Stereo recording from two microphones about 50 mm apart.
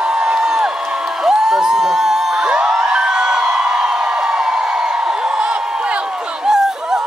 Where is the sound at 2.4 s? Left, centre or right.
Right.